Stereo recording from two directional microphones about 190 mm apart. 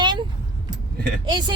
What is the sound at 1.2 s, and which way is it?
Speech, 25° right (ahead or behind).